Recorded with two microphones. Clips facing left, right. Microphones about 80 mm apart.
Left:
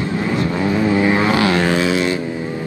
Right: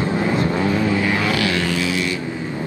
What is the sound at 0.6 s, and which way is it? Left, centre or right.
Vehicle, left.